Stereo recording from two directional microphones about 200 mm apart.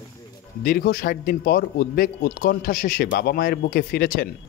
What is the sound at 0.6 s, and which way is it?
Speech, 50° left (ahead or behind).